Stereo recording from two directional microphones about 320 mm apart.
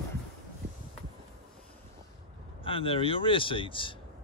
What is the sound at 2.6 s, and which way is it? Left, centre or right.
Speech, centre.